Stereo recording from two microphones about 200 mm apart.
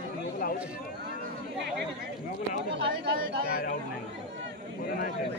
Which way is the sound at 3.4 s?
50° left (ahead or behind).